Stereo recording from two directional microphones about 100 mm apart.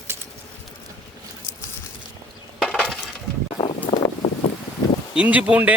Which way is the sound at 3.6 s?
50° left (ahead or behind).